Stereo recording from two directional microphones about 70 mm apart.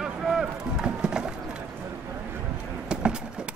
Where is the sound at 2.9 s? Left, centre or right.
Centre.